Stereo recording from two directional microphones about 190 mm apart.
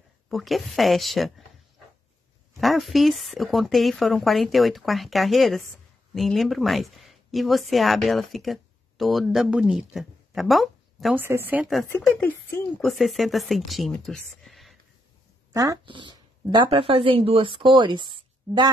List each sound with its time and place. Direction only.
0.3 s a woman's voice: centre (ahead or behind)
2.6 s a woman's voice: centre (ahead or behind)
11.2 s speech: 10° right (ahead or behind)
11.9 s a woman's voice: 10° left (ahead or behind)
15.5 s speech: 20° right (ahead or behind)